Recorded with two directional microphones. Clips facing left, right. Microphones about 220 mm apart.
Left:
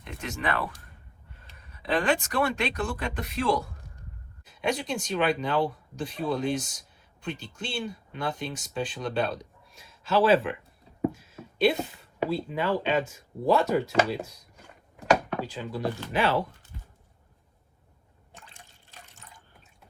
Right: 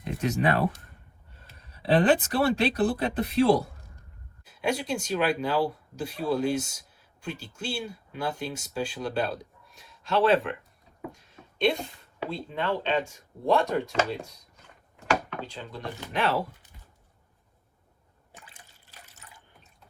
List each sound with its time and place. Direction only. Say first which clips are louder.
0.2 s speech: right 6 dB; 40° right (ahead or behind)
1.7 s speech: right 4 dB; 35° right (ahead or behind)
4.4 s a sound: right 1 dB; 5° right (ahead or behind)
5.0 s speech: even; 5° right (ahead or behind)
11.1 s a sound: left 7 dB; 5° left (ahead or behind)
12.3 s speech: left 2 dB; 5° left (ahead or behind)
18.3 s liquid: even; 5° right (ahead or behind)
18.9 s water: left 2 dB; 10° right (ahead or behind)